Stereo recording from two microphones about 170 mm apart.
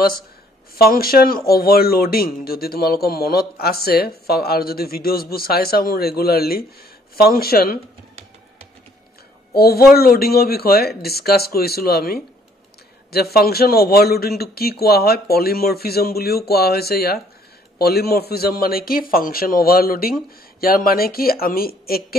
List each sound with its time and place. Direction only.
0.7 s speech: 65° left (ahead or behind)
9.5 s speech: 65° left (ahead or behind)